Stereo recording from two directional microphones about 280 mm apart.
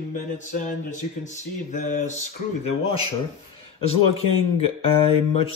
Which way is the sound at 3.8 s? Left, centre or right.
Left.